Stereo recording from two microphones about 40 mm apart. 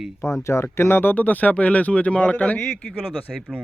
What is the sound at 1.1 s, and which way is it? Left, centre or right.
Speech, left.